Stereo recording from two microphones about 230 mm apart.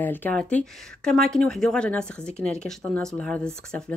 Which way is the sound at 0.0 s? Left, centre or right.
Centre.